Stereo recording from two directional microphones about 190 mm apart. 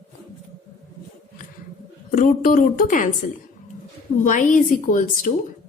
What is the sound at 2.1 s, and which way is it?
A woman's voice, 45° left (ahead or behind).